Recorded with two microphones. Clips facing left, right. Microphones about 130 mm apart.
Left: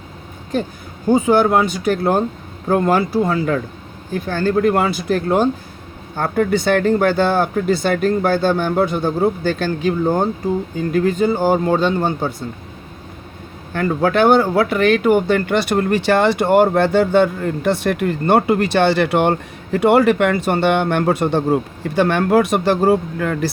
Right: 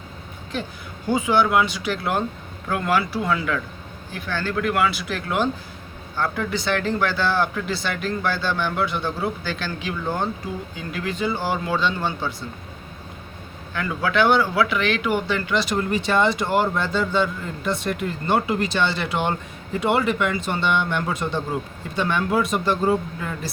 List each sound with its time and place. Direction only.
1.1 s speech: 45° left (ahead or behind)
13.7 s speech: 45° left (ahead or behind); by 23.5 s 70° left (ahead or behind)